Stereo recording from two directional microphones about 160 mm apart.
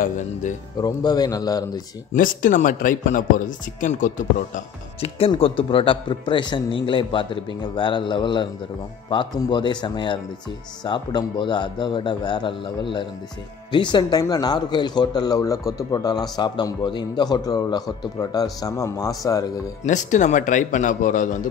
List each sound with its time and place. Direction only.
0.0 s a man's voice: 50° left (ahead or behind)
0.7 s speech: 25° left (ahead or behind)
2.1 s speech: 55° left (ahead or behind)
5.0 s a man's voice: 35° left (ahead or behind)
19.8 s a man's voice: 50° left (ahead or behind)